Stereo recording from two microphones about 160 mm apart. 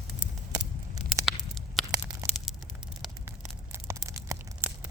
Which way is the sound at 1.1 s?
Centre (ahead or behind).